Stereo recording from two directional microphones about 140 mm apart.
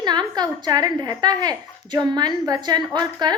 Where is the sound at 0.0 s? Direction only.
30° right (ahead or behind).